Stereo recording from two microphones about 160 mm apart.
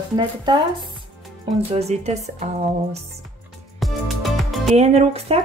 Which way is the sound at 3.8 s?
Centre (ahead or behind).